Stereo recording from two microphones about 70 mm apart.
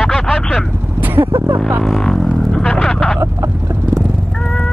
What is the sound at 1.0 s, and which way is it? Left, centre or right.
Vehicle, right.